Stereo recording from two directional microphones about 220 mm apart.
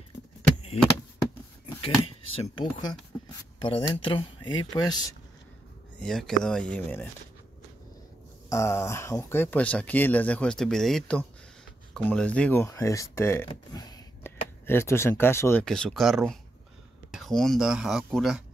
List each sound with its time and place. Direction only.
2.4 s speech: 20° left (ahead or behind)
5.9 s speech: centre (ahead or behind)
8.5 s speech: 10° left (ahead or behind)